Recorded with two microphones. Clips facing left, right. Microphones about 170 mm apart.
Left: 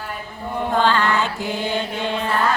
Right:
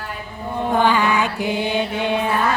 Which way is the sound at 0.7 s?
15° right (ahead or behind).